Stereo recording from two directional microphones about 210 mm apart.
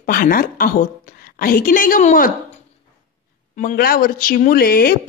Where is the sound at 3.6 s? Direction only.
40° left (ahead or behind).